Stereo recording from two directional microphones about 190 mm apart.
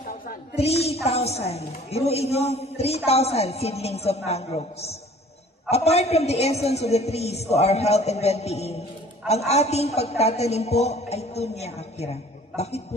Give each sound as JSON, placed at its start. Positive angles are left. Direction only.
{"t": 1.0, "sound": "a woman's voice", "side_deg": 35}